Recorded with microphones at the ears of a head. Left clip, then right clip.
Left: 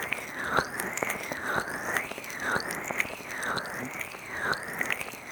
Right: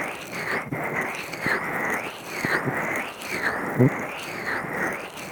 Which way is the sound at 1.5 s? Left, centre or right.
Right.